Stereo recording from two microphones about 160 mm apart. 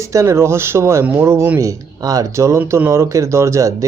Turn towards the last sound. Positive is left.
turn(degrees=-20)  # may be behind; listen again after turning